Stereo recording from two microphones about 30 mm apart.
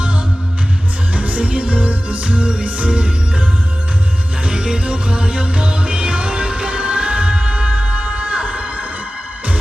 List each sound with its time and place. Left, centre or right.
1.1 s music: right
2.6 s music: right
2.9 s music: right
4.4 s music: right